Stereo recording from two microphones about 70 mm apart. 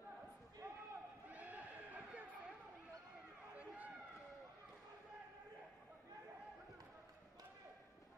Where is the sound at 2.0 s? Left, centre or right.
Centre.